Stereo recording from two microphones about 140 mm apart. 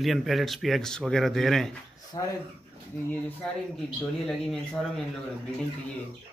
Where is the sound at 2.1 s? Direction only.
35° left (ahead or behind).